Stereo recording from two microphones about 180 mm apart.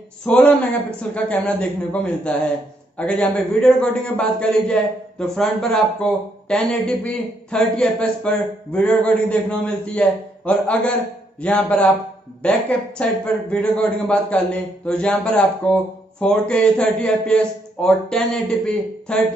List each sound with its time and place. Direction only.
0.2 s a man's voice: 5° left (ahead or behind)